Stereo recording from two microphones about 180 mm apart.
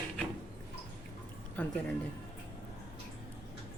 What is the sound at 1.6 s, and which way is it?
Speech, 10° left (ahead or behind).